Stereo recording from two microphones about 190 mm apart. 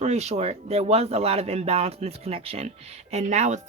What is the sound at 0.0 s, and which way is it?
Speech, 35° right (ahead or behind).